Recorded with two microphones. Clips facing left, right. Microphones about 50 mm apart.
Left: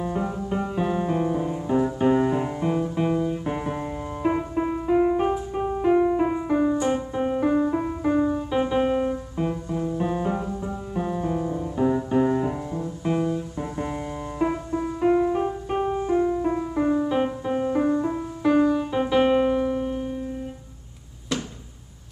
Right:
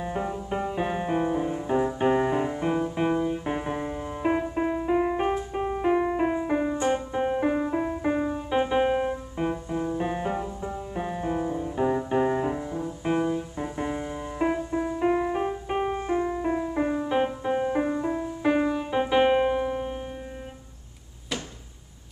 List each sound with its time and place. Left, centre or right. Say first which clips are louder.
0.0 s music: left 3 dB; centre
15.8 s music: left 4 dB; right
16.2 s music: left 3 dB; centre
18.4 s piano: left 5 dB; centre